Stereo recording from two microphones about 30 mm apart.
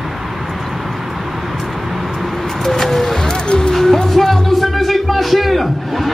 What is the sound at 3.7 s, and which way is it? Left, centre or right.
Music, centre.